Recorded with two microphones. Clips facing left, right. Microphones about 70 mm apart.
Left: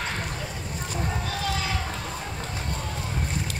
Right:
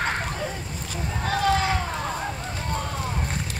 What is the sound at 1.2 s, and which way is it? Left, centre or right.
Run, right.